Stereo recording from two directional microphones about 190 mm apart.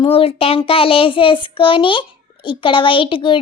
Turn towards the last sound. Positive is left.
turn(degrees=25)  # may be behind; listen again after turning